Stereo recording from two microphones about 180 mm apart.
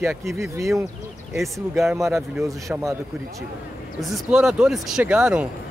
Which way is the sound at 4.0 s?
Centre (ahead or behind).